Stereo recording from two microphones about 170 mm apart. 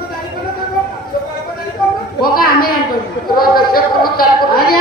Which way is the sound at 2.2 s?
60° left (ahead or behind).